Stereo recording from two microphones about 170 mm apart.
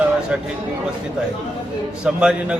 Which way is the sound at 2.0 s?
5° right (ahead or behind).